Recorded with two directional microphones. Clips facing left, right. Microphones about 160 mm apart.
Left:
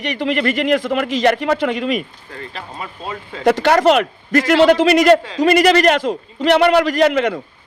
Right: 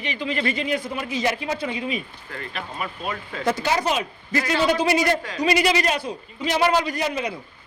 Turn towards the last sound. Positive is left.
turn(degrees=75)  # may be behind; listen again after turning